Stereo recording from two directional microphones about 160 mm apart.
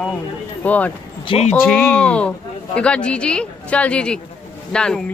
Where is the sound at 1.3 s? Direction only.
40° left (ahead or behind).